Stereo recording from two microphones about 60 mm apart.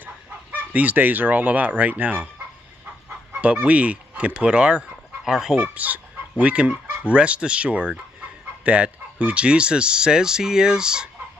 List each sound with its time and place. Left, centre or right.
0.0 s speech: right
3.3 s speech: right
5.8 s speech: right